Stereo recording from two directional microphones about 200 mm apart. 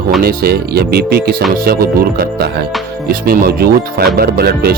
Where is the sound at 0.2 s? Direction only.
50° right (ahead or behind).